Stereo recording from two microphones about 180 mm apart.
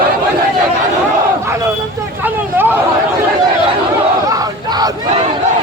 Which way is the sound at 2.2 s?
10° right (ahead or behind).